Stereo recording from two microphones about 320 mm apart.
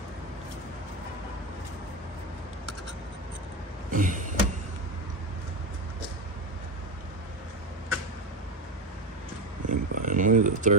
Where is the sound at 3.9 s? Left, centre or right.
Right.